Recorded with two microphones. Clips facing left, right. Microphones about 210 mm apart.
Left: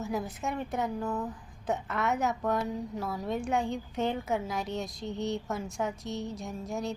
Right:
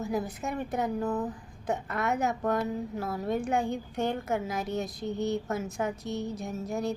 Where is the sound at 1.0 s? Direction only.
30° right (ahead or behind).